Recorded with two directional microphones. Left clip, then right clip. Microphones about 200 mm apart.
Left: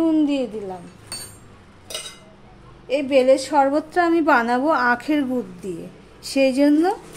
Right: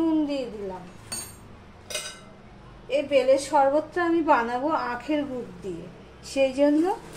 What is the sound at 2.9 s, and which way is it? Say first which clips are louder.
A woman's voice: left 4 dB; 65° left (ahead or behind).